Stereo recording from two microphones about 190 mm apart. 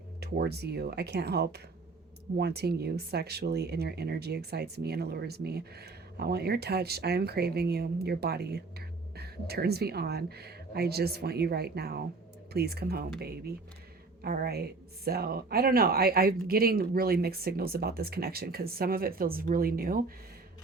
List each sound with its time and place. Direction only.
0.2 s speech: 55° right (ahead or behind)